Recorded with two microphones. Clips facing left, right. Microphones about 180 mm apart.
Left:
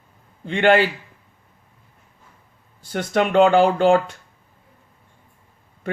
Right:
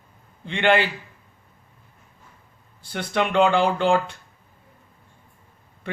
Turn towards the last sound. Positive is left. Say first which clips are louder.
# left 4 dB
turn(degrees=45)  # may be behind; listen again after turning